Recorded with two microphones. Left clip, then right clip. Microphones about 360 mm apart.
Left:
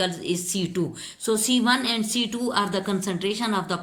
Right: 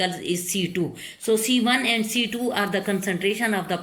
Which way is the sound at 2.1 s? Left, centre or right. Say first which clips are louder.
Right 1 dB; left.